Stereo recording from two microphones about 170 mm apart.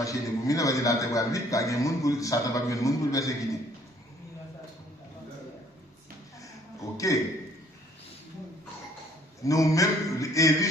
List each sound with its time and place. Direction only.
0.0 s a man's voice: 20° left (ahead or behind)
6.9 s a man's voice: 20° left (ahead or behind)
9.4 s a man's voice: 20° left (ahead or behind)